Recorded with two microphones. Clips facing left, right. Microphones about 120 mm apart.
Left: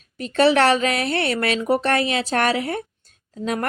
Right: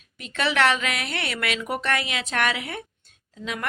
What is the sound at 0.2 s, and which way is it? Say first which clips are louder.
Speech: left 7 dB; 35° left (ahead or behind).